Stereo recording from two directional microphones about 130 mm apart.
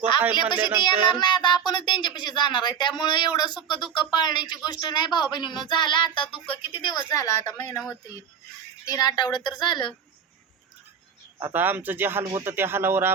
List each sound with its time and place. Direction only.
0.3 s speech: 35° left (ahead or behind)
7.1 s speech: 25° left (ahead or behind)
8.9 s speech: 30° left (ahead or behind)
11.3 s speech: 20° right (ahead or behind)